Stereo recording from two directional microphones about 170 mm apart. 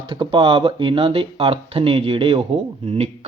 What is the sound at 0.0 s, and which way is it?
Speech, 30° right (ahead or behind).